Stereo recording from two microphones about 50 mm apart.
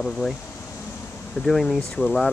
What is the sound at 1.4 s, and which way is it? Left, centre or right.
Speech, left.